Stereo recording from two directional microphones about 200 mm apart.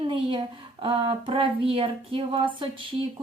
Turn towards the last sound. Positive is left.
turn(degrees=-25)  # may be behind; listen again after turning